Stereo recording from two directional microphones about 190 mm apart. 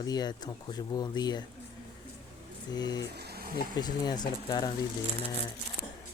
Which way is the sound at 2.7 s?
20° left (ahead or behind).